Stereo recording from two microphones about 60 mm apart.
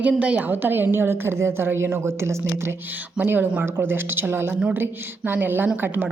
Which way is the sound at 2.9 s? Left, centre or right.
Right.